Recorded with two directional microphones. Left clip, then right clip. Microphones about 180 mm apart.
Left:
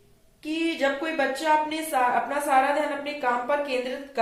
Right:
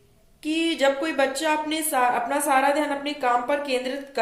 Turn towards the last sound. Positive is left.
turn(degrees=-65)  # may be behind; listen again after turning